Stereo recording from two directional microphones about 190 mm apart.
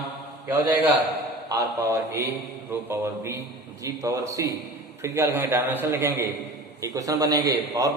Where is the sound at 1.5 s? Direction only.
15° right (ahead or behind).